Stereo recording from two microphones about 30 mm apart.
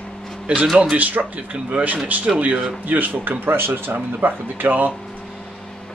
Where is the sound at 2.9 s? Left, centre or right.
Right.